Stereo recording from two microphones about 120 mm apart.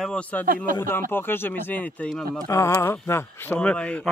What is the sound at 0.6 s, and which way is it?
Speech, 20° left (ahead or behind).